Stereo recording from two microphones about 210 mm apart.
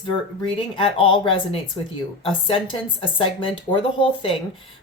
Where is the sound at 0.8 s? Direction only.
25° left (ahead or behind).